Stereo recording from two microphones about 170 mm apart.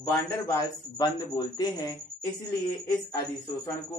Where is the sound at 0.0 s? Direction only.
15° left (ahead or behind).